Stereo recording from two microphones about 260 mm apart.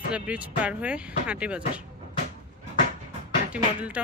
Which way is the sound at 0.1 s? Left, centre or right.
Centre.